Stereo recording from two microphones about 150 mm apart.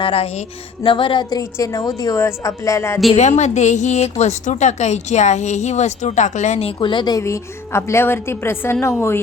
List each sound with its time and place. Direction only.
0.0 s speech: 40° left (ahead or behind); by 3.0 s 20° left (ahead or behind)
3.1 s a woman's voice: 50° left (ahead or behind)
6.7 s a woman's voice: 30° left (ahead or behind)